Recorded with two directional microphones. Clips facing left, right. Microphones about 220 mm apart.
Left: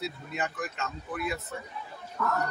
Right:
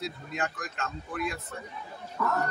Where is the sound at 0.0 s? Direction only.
5° left (ahead or behind).